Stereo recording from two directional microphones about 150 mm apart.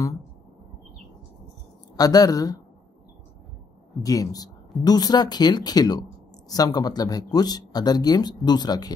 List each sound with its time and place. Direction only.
2.0 s speech: 25° left (ahead or behind)
4.0 s speech: 25° left (ahead or behind)